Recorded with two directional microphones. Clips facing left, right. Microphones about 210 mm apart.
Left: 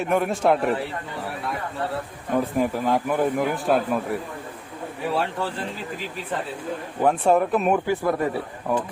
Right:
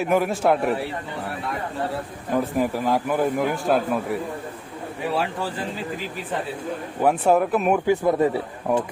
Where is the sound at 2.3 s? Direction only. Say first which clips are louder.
Even; centre (ahead or behind).